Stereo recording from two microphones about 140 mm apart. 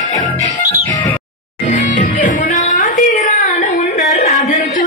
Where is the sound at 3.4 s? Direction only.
60° left (ahead or behind).